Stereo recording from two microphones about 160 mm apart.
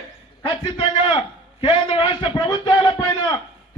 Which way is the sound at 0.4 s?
35° left (ahead or behind).